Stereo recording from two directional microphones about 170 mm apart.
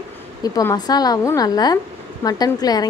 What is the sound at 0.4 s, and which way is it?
A woman's voice, 20° left (ahead or behind).